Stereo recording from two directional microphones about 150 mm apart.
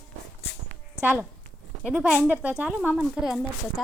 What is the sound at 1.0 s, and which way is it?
A woman's voice, 15° right (ahead or behind).